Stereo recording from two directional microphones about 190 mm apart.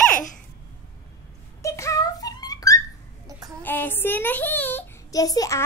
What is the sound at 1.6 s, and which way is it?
Wail, 15° left (ahead or behind).